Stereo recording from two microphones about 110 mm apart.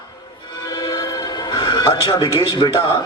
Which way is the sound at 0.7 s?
40° left (ahead or behind).